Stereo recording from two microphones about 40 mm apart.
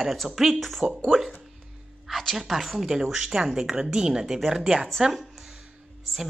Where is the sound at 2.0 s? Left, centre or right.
Centre.